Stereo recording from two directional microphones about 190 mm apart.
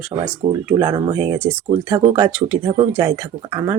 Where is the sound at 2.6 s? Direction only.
20° right (ahead or behind).